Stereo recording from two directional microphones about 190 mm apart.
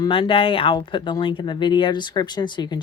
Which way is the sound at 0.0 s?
25° left (ahead or behind).